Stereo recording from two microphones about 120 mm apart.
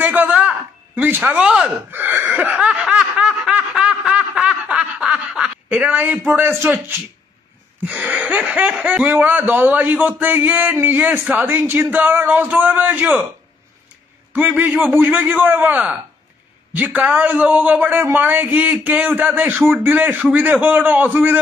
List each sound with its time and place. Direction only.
0.0 s a sound: 15° right (ahead or behind)
1.9 s snicker: 15° right (ahead or behind)
7.8 s a man's voice: 10° right (ahead or behind)
14.3 s a man's voice: 15° right (ahead or behind)